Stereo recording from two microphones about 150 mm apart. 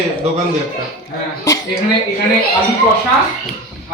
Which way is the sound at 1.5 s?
20° left (ahead or behind).